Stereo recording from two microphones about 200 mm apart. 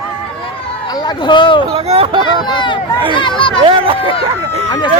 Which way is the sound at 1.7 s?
30° right (ahead or behind).